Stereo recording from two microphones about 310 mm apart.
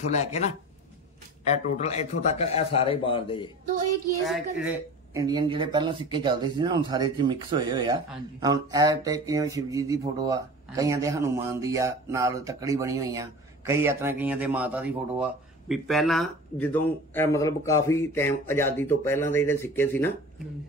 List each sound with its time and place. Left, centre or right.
0.1 s a man's voice: left
1.4 s a man's voice: left
5.1 s speech: centre